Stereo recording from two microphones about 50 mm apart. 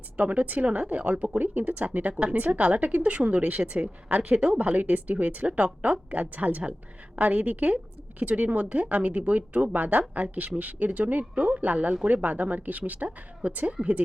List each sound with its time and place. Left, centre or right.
0.2 s speech: right